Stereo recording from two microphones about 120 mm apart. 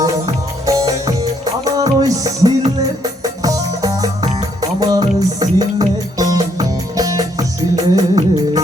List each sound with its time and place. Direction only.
0.0 s music: 30° right (ahead or behind)